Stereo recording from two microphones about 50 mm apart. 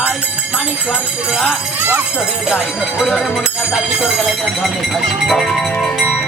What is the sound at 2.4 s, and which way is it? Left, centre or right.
Speech, centre.